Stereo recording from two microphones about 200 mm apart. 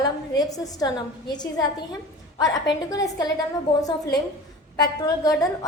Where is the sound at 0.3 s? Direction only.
20° left (ahead or behind).